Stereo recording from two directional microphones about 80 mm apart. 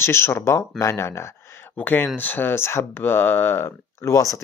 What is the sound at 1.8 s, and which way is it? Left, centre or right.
Speech, left.